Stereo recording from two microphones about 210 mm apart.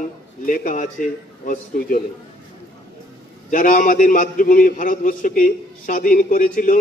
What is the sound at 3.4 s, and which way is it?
A man's voice, 40° left (ahead or behind).